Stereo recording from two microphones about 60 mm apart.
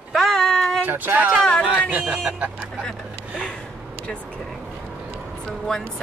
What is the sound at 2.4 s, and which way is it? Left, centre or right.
Speech, right.